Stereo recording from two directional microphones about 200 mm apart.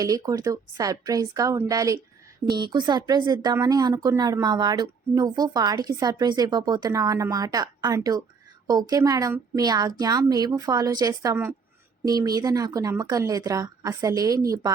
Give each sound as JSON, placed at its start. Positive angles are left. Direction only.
{"t": 0.0, "sound": "a woman's voice", "side_deg": -15}